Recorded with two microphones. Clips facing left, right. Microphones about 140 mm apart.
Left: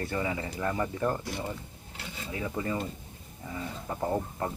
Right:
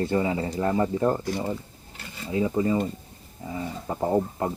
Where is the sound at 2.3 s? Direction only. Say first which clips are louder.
Right 9 dB; 25° right (ahead or behind).